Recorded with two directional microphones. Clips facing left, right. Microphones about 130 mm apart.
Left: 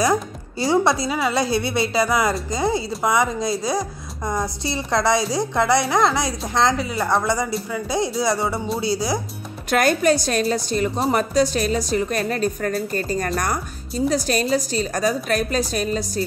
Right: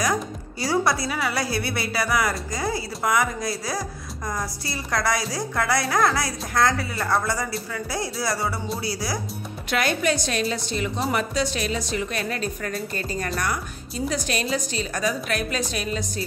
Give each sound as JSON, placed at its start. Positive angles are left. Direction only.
{"t": 0.6, "sound": "speech", "side_deg": 25}
{"t": 9.7, "sound": "a woman's voice", "side_deg": 45}